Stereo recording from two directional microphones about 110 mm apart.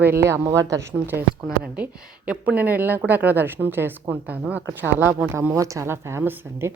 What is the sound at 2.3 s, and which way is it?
A woman's voice, 15° right (ahead or behind).